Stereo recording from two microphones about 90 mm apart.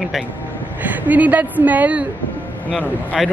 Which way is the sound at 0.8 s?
20° right (ahead or behind).